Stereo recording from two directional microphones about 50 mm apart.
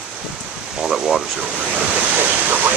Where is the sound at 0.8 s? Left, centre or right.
Centre.